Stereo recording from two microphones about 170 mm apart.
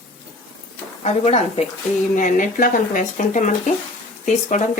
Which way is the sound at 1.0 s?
40° left (ahead or behind).